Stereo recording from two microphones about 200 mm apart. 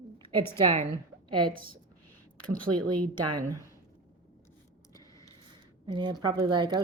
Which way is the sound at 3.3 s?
20° right (ahead or behind).